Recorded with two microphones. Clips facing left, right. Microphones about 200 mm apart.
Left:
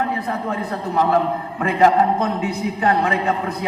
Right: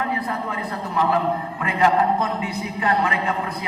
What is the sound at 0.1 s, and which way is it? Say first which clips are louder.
A man's voice: left 3 dB; 45° left (ahead or behind).